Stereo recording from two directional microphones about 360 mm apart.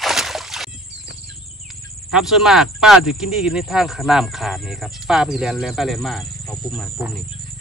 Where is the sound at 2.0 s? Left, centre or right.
Centre.